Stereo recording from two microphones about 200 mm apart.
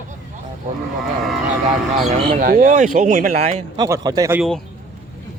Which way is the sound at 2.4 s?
45° right (ahead or behind).